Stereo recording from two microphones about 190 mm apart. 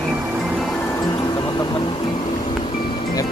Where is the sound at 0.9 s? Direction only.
20° left (ahead or behind).